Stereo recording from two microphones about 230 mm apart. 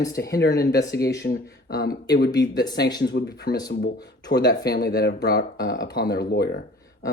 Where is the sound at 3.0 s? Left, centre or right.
Left.